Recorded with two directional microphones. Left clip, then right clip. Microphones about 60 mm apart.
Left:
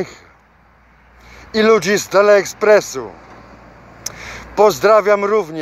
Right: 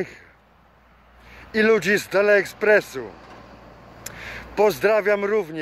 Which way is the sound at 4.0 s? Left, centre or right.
Centre.